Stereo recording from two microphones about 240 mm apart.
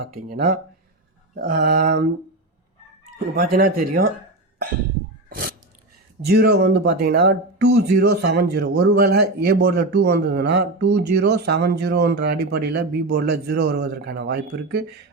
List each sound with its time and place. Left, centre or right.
0.3 s speech: right
3.3 s speech: right
5.3 s biting: right
6.2 s speech: right